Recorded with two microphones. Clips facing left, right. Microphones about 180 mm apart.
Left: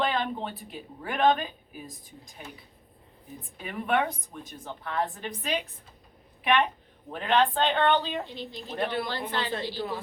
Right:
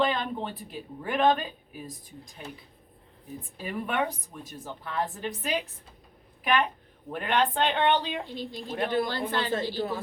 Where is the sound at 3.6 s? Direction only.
Centre (ahead or behind).